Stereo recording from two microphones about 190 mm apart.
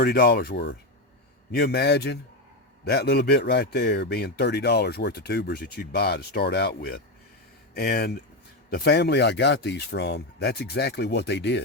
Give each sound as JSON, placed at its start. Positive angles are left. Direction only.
{"t": 0.0, "sound": "speech", "side_deg": 55}